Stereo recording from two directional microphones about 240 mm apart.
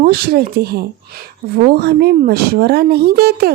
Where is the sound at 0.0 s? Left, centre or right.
Right.